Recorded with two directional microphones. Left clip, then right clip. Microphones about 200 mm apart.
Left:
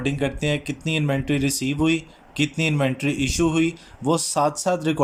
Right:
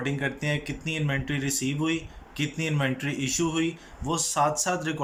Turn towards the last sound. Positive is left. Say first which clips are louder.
# left 6 dB
turn(degrees=25)  # may be behind; listen again after turning